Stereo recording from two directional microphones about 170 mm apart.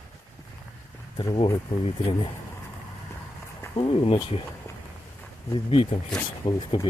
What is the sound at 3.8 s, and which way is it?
Speech, 35° left (ahead or behind).